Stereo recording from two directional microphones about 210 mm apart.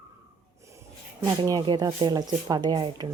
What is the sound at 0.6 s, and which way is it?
Speech, 15° right (ahead or behind).